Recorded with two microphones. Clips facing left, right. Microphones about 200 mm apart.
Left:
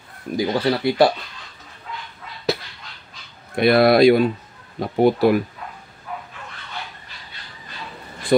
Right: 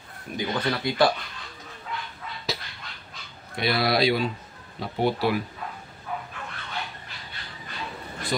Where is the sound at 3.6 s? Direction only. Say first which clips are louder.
Left 10 dB; 55° left (ahead or behind).